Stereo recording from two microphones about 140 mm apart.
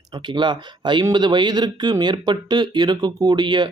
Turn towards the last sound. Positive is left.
turn(degrees=-30)  # may be behind; listen again after turning